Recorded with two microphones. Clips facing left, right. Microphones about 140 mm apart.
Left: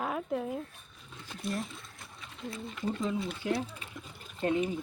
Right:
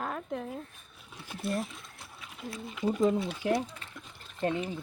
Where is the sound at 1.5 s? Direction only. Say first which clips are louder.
Right 3 dB; centre (ahead or behind).